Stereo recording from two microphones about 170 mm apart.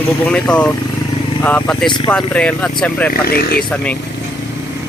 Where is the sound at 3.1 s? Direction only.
65° left (ahead or behind).